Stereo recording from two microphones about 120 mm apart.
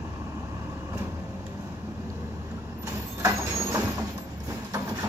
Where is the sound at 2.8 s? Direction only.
25° right (ahead or behind).